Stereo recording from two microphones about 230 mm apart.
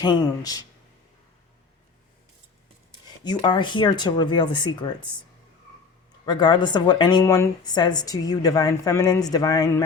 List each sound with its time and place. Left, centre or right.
0.0 s speech: centre
3.2 s speech: centre
6.2 s speech: centre